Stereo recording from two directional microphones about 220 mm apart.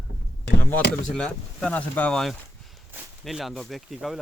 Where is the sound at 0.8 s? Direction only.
35° left (ahead or behind).